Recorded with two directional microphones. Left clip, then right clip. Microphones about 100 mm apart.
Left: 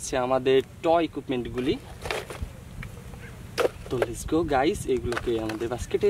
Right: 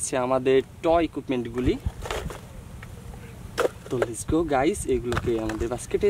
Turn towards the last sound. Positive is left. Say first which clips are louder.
# right 1 dB
turn(degrees=-25)  # may be behind; listen again after turning